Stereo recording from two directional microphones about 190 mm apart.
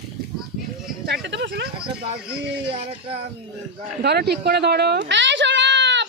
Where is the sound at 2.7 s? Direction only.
30° right (ahead or behind).